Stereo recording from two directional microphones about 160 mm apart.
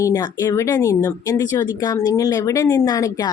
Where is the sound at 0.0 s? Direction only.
25° left (ahead or behind).